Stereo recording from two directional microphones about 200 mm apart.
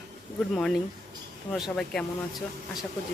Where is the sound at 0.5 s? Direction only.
5° left (ahead or behind).